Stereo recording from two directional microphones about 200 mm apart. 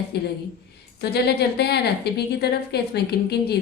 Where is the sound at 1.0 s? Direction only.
55° left (ahead or behind).